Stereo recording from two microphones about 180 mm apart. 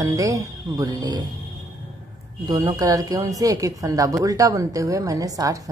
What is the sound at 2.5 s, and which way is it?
A woman's voice, 20° right (ahead or behind).